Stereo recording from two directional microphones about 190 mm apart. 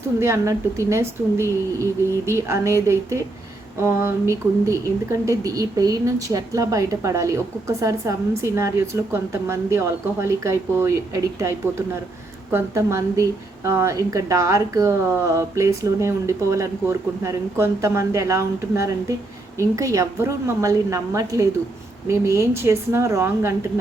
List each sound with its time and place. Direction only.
0.2 s a woman's voice: 15° right (ahead or behind)